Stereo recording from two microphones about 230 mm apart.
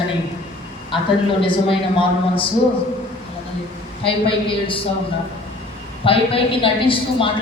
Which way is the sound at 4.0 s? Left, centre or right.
Left.